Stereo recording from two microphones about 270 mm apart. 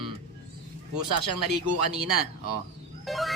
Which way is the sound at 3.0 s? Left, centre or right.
Centre.